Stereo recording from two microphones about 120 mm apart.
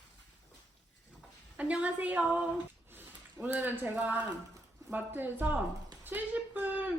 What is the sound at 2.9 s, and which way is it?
A woman's voice, 15° right (ahead or behind).